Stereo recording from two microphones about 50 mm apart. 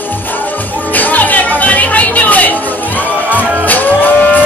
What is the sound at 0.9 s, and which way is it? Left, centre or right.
Music, left.